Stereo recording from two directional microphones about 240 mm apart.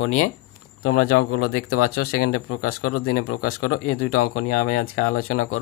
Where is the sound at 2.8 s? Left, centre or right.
Left.